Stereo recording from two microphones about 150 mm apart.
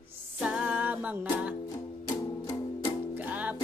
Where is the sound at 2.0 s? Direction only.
20° left (ahead or behind).